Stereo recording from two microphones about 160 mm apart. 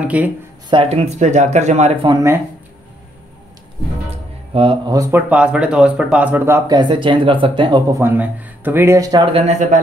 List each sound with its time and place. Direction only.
0.0 s speech: 10° right (ahead or behind)
0.7 s speech: 35° right (ahead or behind)
2.0 s speech: 20° right (ahead or behind)
4.6 s speech: 35° right (ahead or behind)
4.9 s speech: 20° right (ahead or behind)
5.3 s speech: 5° right (ahead or behind)
6.7 s speech: 30° right (ahead or behind)
8.0 s speech: 10° right (ahead or behind)
9.2 s speech: 40° right (ahead or behind)